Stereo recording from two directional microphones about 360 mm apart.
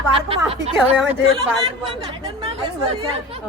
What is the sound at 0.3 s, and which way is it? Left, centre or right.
Speech, centre.